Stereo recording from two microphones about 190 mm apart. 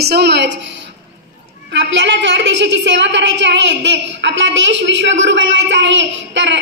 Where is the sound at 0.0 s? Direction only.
60° right (ahead or behind).